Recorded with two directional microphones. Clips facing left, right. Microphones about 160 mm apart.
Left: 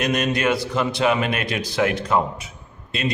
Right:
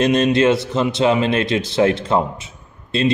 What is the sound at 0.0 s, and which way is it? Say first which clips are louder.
A man's voice: right 7 dB; 25° right (ahead or behind).